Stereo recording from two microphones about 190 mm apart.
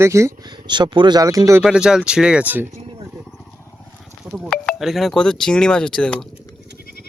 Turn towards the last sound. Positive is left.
turn(degrees=5)  # may be behind; listen again after turning